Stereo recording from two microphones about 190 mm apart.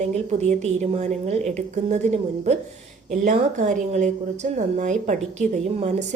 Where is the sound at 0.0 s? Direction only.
35° right (ahead or behind).